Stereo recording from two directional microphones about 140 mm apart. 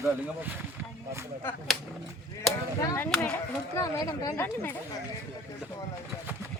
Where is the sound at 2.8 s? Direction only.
25° left (ahead or behind).